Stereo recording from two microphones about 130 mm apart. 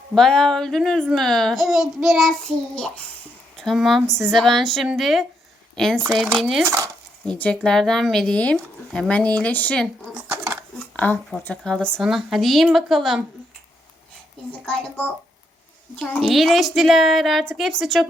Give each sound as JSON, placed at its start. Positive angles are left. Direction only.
{"t": 0.1, "sound": "a woman's voice", "side_deg": 5}
{"t": 3.6, "sound": "a woman's voice", "side_deg": 0}
{"t": 6.6, "sound": "speech", "side_deg": -20}
{"t": 7.3, "sound": "speech", "side_deg": 10}
{"t": 10.2, "sound": "a sound", "side_deg": -25}
{"t": 10.9, "sound": "a woman's voice", "side_deg": 15}
{"t": 14.7, "sound": "speech", "side_deg": 15}
{"t": 16.0, "sound": "a woman's voice", "side_deg": 0}